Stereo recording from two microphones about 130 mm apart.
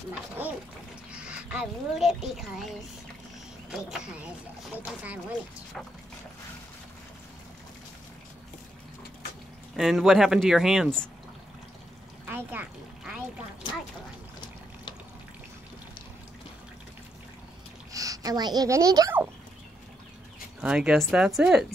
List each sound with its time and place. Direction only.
1.1 s speech: 10° right (ahead or behind)
9.8 s speech: centre (ahead or behind)
12.3 s speech: 15° right (ahead or behind)
17.9 s a woman's voice: 25° right (ahead or behind)
20.6 s speech: 5° right (ahead or behind)